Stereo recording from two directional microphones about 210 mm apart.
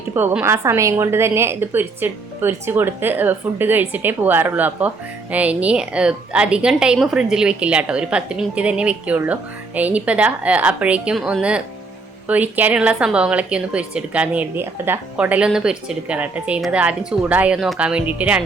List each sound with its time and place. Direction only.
0.1 s a woman's voice: 10° right (ahead or behind)